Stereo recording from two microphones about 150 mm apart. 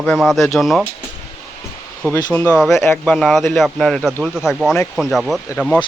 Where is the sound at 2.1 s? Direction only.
25° left (ahead or behind).